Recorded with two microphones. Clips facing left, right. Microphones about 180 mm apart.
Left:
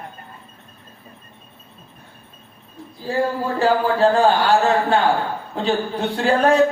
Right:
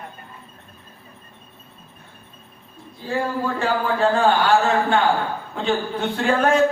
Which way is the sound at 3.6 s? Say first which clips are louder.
Left 6 dB; 35° left (ahead or behind).